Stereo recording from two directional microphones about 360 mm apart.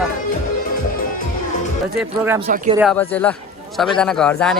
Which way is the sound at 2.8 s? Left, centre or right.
Centre.